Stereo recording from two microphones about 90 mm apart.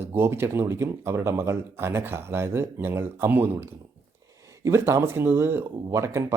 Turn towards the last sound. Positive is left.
turn(degrees=-35)  # may be behind; listen again after turning